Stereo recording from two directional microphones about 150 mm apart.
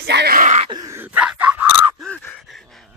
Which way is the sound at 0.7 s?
25° right (ahead or behind).